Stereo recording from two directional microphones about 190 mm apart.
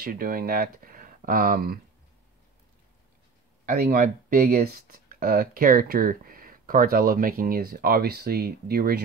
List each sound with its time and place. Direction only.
0.0 s speech: 50° right (ahead or behind)
3.6 s speech: 50° right (ahead or behind)